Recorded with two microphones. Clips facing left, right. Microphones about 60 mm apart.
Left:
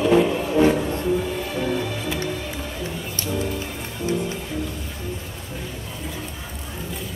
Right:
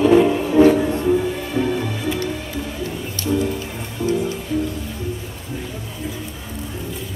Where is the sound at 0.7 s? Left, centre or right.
Centre.